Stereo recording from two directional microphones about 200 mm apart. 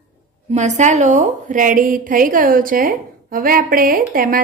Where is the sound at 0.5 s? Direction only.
35° right (ahead or behind).